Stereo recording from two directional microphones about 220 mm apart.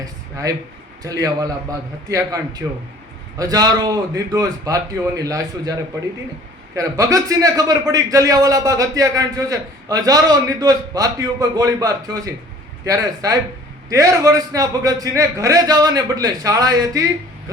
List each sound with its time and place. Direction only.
0.0 s a man's voice: 15° right (ahead or behind)
6.7 s a man's voice: 15° right (ahead or behind)